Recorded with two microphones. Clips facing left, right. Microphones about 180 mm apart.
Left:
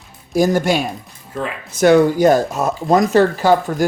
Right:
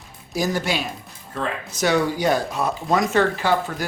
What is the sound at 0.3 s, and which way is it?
Speech, 50° left (ahead or behind).